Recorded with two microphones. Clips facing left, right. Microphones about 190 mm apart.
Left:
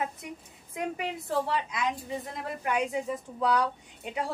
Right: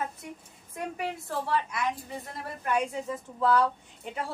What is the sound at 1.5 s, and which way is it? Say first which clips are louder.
A woman's voice: right 1 dB; 15° left (ahead or behind).